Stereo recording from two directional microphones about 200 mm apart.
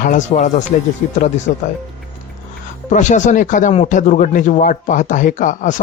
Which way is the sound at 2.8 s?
35° left (ahead or behind).